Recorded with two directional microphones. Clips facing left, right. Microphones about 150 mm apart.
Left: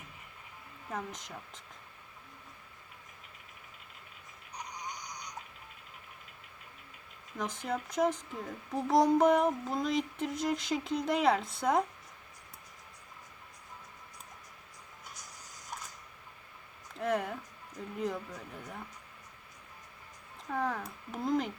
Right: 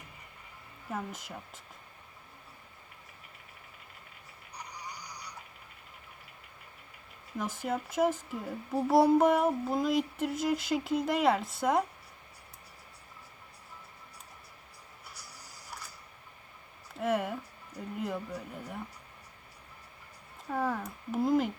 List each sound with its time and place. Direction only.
0.9 s a child's voice: 5° right (ahead or behind)
7.3 s a child's voice: 5° right (ahead or behind)
15.1 s printer: 35° right (ahead or behind)
16.9 s speech: 5° right (ahead or behind)
20.5 s a child's voice: 5° right (ahead or behind)